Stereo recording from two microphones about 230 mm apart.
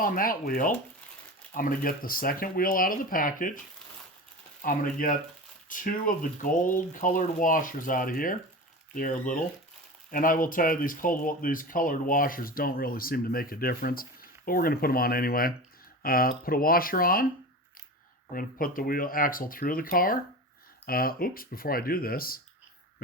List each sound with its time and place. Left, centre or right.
0.0 s speech: left
4.6 s speech: left
18.3 s speech: left